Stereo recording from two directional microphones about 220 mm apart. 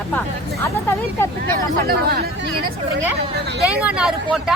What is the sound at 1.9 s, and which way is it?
Speech, 45° right (ahead or behind).